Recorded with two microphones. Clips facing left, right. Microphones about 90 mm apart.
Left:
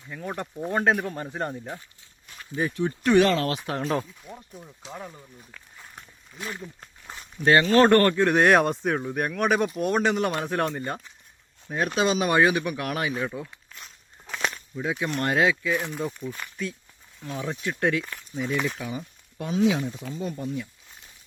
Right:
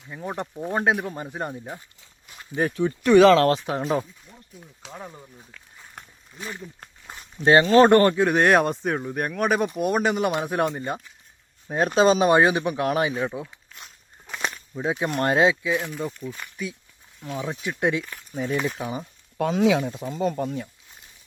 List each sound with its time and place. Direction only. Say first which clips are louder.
0.1 s speech: right 2 dB; 20° right (ahead or behind)
3.2 s speech: right 9 dB; 70° right (ahead or behind)
3.7 s speech: right 2 dB; 10° right (ahead or behind)
6.3 s speech: even; centre (ahead or behind)
7.2 s speech: right 3 dB; 25° right (ahead or behind)
8.2 s speech: even; centre (ahead or behind)
11.7 s speech: right 5 dB; 30° right (ahead or behind); by 13.5 s 15° right (ahead or behind)
14.3 s a sound: left 1 dB; 5° right (ahead or behind)
14.8 s speech: right 3 dB; 30° right (ahead or behind)
16.0 s speech: even; centre (ahead or behind)
17.6 s speech: right 1 dB; 15° right (ahead or behind)
18.3 s speech: right 2 dB; 40° right (ahead or behind)
19.4 s speech: right 3 dB; 80° right
20.1 s speech: right 6 dB; 65° right (ahead or behind)